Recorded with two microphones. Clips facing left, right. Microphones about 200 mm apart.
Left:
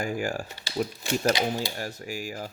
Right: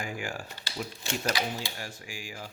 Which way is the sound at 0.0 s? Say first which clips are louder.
Left 7 dB; 40° left (ahead or behind).